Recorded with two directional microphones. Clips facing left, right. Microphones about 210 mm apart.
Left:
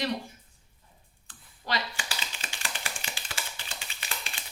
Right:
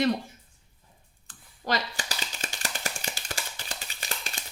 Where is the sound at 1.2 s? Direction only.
45° right (ahead or behind).